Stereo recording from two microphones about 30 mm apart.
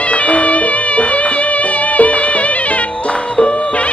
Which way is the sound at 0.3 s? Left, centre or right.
Left.